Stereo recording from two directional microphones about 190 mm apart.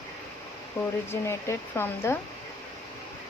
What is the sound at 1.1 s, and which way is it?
Speech, 15° left (ahead or behind).